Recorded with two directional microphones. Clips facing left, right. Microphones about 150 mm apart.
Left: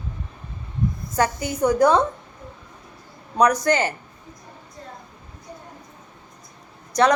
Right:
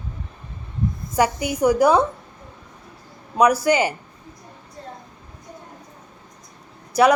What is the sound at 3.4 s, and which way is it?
Speech, 10° right (ahead or behind).